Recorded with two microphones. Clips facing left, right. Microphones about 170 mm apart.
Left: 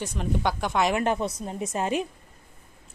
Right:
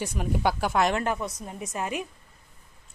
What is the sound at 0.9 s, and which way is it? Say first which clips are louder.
A woman's voice: left 3 dB; 25° left (ahead or behind).